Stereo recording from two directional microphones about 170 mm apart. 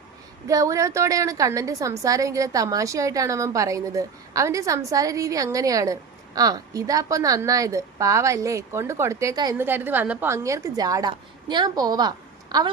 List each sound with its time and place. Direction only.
0.4 s a woman's voice: 20° right (ahead or behind)
9.6 s a woman's voice: 10° right (ahead or behind)